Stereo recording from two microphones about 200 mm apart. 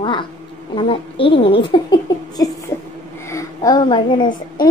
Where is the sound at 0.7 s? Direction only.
25° left (ahead or behind).